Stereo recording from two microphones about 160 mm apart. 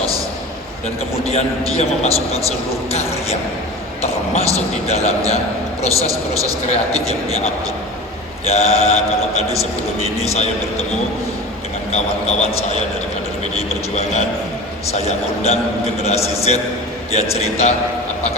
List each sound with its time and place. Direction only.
1.2 s a man's voice: 40° left (ahead or behind)
6.7 s a man's voice: 40° left (ahead or behind)
11.9 s a man's voice: 40° left (ahead or behind)